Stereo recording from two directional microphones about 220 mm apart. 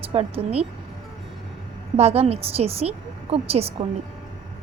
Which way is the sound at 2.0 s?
30° right (ahead or behind).